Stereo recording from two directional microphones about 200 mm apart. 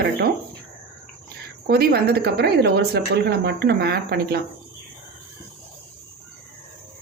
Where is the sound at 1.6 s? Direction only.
50° right (ahead or behind).